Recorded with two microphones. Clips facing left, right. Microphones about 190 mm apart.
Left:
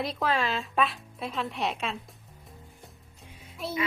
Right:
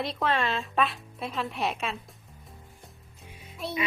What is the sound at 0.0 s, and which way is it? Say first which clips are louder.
Speech: even; centre (ahead or behind).